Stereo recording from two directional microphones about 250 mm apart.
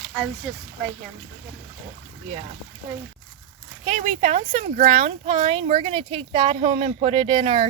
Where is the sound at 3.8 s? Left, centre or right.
Right.